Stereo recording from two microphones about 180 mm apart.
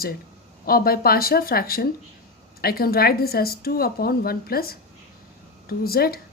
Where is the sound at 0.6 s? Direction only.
55° left (ahead or behind).